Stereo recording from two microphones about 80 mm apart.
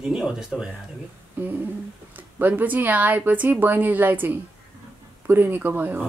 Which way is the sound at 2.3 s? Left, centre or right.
Right.